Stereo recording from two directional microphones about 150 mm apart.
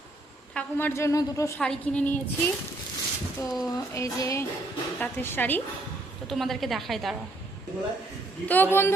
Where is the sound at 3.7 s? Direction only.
20° left (ahead or behind).